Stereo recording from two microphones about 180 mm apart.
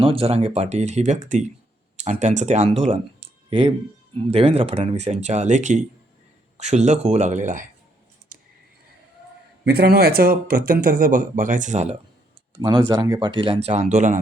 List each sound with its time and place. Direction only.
0.0 s speech: 30° right (ahead or behind)
4.3 s speech: 35° right (ahead or behind)
8.3 s a sound: 50° right (ahead or behind)
9.6 s speech: 60° right (ahead or behind); by 11.9 s 40° right (ahead or behind)
12.9 s speech: 25° right (ahead or behind); by 14.2 s 40° right (ahead or behind)